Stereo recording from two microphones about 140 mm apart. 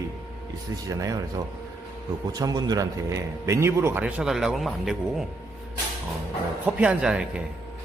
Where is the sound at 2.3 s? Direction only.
25° right (ahead or behind).